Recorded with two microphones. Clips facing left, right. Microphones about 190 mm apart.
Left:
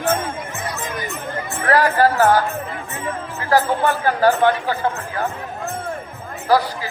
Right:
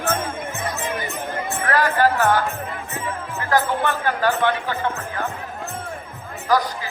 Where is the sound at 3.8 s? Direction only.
35° left (ahead or behind).